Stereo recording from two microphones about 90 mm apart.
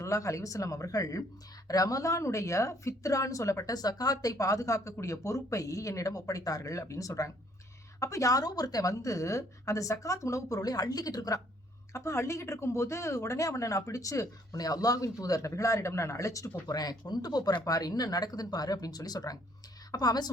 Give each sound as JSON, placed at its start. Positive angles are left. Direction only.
{"t": 0.0, "sound": "speech", "side_deg": 35}
{"t": 11.9, "sound": "speech", "side_deg": 30}